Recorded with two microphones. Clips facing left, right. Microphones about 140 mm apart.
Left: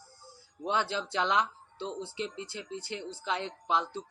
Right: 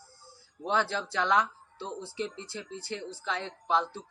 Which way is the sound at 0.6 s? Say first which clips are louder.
Right 2 dB; 15° left (ahead or behind).